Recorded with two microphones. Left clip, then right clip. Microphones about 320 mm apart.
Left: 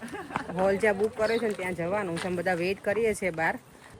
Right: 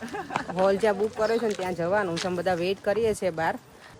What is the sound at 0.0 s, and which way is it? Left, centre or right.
Run, right.